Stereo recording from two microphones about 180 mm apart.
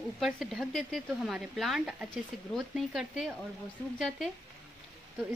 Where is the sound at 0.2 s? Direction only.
Centre (ahead or behind).